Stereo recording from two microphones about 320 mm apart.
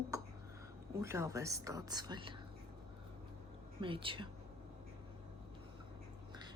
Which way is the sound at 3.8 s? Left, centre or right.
Centre.